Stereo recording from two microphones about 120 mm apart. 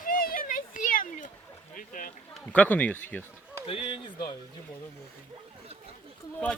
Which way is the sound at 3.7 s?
50° left (ahead or behind).